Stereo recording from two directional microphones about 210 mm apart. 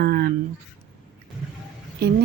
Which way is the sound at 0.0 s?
50° right (ahead or behind).